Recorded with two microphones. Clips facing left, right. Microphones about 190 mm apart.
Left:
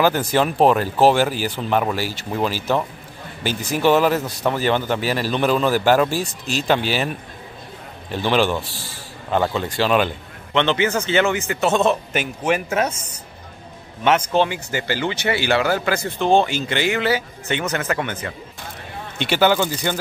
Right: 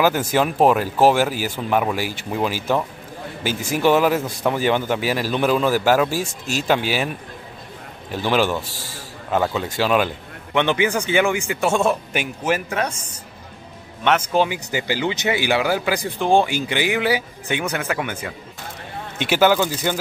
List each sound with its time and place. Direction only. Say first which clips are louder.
0.0 s speech: even; 5° right (ahead or behind)
6.2 s speech: even; 45° right (ahead or behind)
6.7 s speech: even; 10° right (ahead or behind)
8.1 s speech: left 1 dB; 5° right (ahead or behind)
8.6 s a man's voice: right 1 dB; 45° right (ahead or behind)
9.3 s speech: left 1 dB; 5° right (ahead or behind)
14.0 s speech: left 1 dB; 5° right (ahead or behind)